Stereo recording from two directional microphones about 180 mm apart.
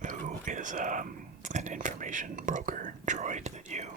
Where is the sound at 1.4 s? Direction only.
45° right (ahead or behind).